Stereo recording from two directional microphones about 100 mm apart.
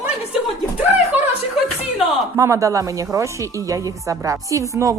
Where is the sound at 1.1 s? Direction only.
15° right (ahead or behind).